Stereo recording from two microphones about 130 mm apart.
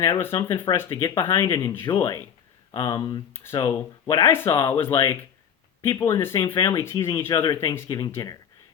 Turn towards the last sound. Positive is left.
turn(degrees=20)  # may be behind; listen again after turning